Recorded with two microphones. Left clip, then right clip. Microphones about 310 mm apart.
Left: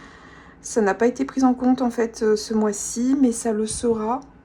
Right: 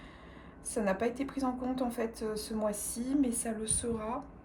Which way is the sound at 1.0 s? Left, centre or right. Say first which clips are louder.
Left 14 dB; left.